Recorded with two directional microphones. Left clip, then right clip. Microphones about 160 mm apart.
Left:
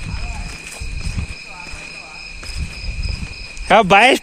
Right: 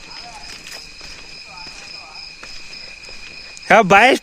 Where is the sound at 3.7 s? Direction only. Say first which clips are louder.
Even; 50° right (ahead or behind).